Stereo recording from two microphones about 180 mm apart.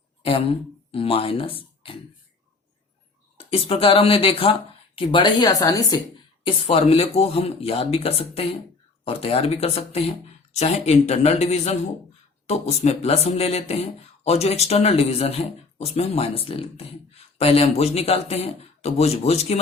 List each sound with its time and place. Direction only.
0.2 s speech: 30° left (ahead or behind)
3.3 s a woman's voice: 30° left (ahead or behind)
6.4 s speech: 30° left (ahead or behind)